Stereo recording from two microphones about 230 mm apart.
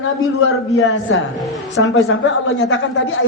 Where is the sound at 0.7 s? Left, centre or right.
Left.